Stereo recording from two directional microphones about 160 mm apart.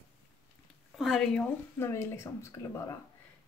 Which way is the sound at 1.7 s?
15° left (ahead or behind).